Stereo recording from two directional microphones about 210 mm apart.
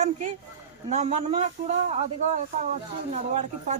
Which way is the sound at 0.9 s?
35° right (ahead or behind).